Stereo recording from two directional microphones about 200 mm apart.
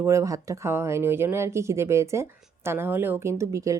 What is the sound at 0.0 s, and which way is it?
Speech, 15° right (ahead or behind).